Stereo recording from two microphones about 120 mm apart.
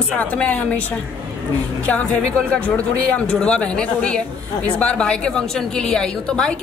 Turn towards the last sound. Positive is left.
turn(degrees=5)  # may be behind; listen again after turning